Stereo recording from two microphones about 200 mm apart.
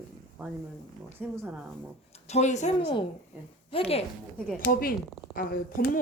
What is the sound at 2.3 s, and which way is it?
A woman's voice, 35° left (ahead or behind).